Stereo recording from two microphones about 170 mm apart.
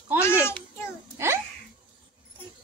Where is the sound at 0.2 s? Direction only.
15° left (ahead or behind).